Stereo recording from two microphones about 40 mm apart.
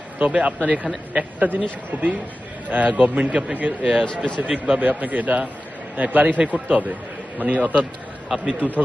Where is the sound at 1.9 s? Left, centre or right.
Right.